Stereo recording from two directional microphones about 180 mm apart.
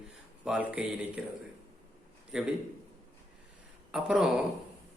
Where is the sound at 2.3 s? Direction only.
5° right (ahead or behind).